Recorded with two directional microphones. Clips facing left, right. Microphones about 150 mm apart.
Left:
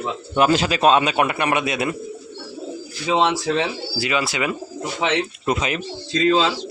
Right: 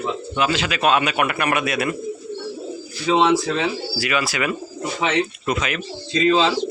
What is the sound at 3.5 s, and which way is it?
A man's voice, 25° left (ahead or behind).